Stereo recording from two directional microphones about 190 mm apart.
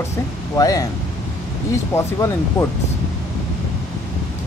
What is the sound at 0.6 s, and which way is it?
Speech, 20° left (ahead or behind).